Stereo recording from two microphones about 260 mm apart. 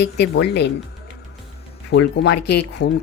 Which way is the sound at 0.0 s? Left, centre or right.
Left.